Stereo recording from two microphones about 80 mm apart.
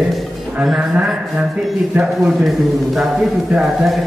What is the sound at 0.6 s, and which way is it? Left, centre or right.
A man's voice, centre.